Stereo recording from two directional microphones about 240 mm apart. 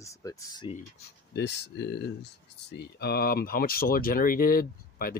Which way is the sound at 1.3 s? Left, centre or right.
Left.